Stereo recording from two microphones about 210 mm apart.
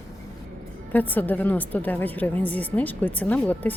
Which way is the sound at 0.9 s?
10° left (ahead or behind).